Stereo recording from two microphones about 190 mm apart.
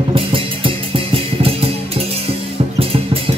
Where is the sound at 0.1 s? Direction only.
25° right (ahead or behind).